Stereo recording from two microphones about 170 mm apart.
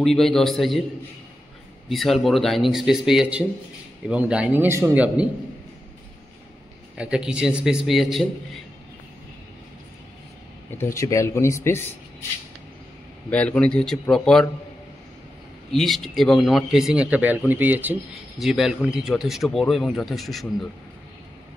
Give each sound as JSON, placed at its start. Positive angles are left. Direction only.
{"t": 0.0, "sound": "speech", "side_deg": 0}
{"t": 1.9, "sound": "a man's voice", "side_deg": 0}
{"t": 7.0, "sound": "speech", "side_deg": -5}
{"t": 10.7, "sound": "a man's voice", "side_deg": 15}
{"t": 13.3, "sound": "a man's voice", "side_deg": 10}
{"t": 15.7, "sound": "speech", "side_deg": 0}